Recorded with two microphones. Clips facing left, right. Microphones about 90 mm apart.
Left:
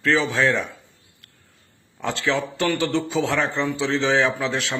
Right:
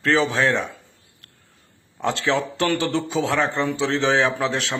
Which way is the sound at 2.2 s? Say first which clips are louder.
Even; 20° right (ahead or behind).